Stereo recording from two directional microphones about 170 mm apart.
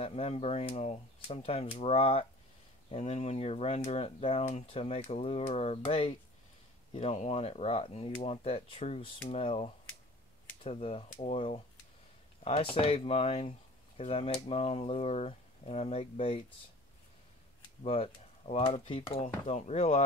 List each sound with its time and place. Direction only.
0.0 s speech: 35° left (ahead or behind)
17.6 s speech: 35° left (ahead or behind)